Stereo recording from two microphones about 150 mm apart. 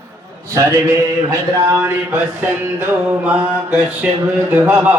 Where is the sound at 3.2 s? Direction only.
10° right (ahead or behind).